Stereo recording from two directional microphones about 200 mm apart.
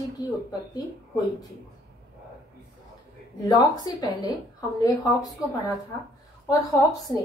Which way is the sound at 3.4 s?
20° left (ahead or behind).